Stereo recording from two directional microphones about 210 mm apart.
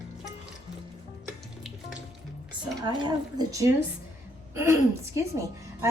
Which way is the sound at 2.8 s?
20° right (ahead or behind).